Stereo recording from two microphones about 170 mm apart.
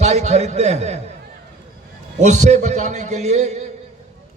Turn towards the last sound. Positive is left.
turn(degrees=-40)  # may be behind; listen again after turning